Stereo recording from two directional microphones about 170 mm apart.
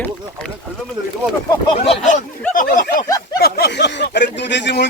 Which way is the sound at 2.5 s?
55° left (ahead or behind).